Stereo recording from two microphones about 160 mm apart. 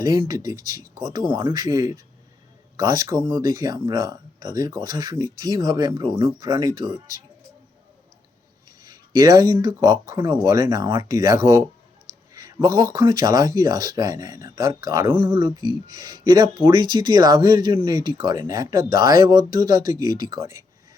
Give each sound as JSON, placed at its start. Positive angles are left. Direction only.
{"t": 0.0, "sound": "speech", "side_deg": -20}
{"t": 8.8, "sound": "speech", "side_deg": -25}
{"t": 15.1, "sound": "speech", "side_deg": -35}